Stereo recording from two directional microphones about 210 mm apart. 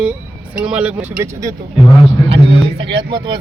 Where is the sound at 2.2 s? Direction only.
25° right (ahead or behind).